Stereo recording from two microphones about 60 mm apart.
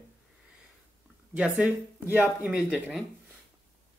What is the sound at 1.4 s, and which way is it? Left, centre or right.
Speech, centre.